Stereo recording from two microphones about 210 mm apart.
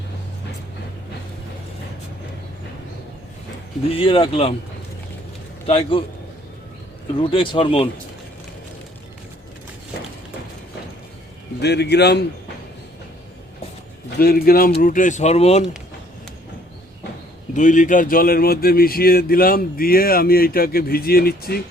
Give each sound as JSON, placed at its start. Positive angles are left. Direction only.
{"t": 3.8, "sound": "speech", "side_deg": 25}
{"t": 5.6, "sound": "speech", "side_deg": 25}
{"t": 7.2, "sound": "speech", "side_deg": 25}
{"t": 11.6, "sound": "speech", "side_deg": 50}
{"t": 14.2, "sound": "speech", "side_deg": 45}
{"t": 17.5, "sound": "speech", "side_deg": 35}